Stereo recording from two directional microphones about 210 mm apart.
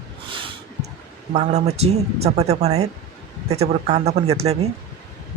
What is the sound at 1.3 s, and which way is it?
Speech, 30° right (ahead or behind).